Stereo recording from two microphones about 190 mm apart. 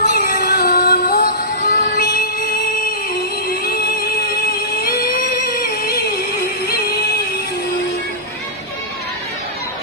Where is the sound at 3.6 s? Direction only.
55° left (ahead or behind).